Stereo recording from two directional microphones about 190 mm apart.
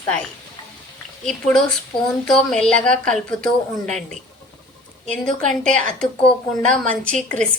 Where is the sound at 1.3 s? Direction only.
5° left (ahead or behind).